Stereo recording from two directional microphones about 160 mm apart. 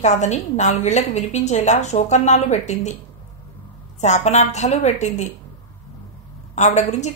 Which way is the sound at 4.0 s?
45° left (ahead or behind).